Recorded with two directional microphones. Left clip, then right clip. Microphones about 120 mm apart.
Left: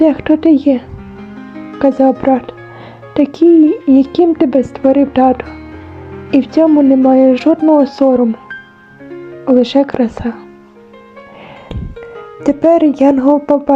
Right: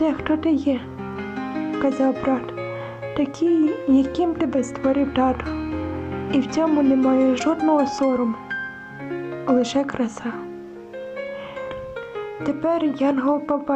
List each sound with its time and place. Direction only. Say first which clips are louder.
0.0 s speech: left 11 dB; 40° left (ahead or behind)
1.8 s speech: left 12 dB; 40° left (ahead or behind)
9.5 s speech: left 10 dB; 35° left (ahead or behind)
12.4 s speech: left 13 dB; 60° left (ahead or behind)